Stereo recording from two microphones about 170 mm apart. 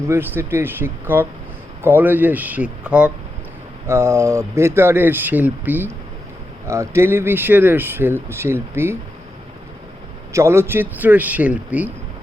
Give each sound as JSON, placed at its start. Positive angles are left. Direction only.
{"t": 0.0, "sound": "speech", "side_deg": -15}
{"t": 10.3, "sound": "speech", "side_deg": -15}